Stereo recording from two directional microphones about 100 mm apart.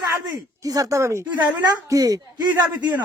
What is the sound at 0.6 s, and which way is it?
Speech, 35° right (ahead or behind).